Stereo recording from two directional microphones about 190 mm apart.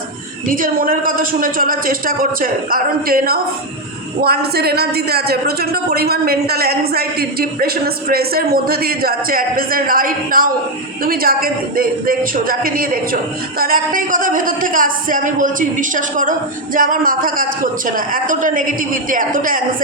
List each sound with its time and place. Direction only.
0.4 s a woman's voice: 45° right (ahead or behind)